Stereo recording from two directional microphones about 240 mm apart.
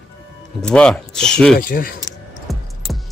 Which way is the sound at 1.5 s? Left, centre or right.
Left.